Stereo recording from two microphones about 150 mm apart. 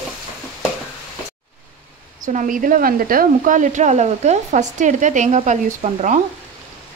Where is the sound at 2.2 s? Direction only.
60° right (ahead or behind).